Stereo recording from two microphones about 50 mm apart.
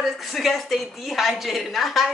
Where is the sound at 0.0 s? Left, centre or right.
Centre.